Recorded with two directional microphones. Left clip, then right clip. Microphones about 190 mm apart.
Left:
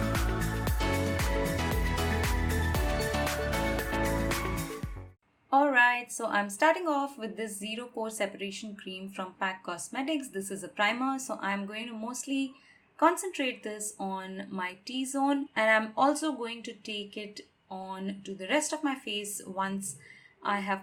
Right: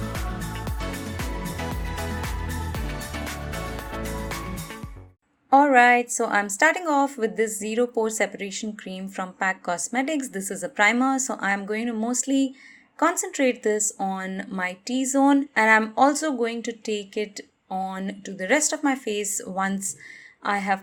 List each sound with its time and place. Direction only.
0.0 s music: centre (ahead or behind)
5.5 s a woman's voice: 40° right (ahead or behind)